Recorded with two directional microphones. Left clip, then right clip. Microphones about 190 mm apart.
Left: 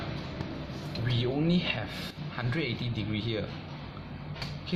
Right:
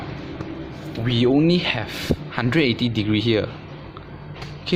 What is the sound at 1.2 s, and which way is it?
Speech, 55° right (ahead or behind).